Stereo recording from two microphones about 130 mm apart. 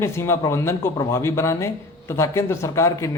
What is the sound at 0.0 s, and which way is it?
A man's voice, 20° left (ahead or behind).